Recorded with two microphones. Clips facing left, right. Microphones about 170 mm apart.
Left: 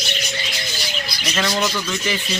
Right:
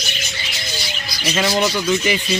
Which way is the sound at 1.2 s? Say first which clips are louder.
Right 4 dB; 10° right (ahead or behind).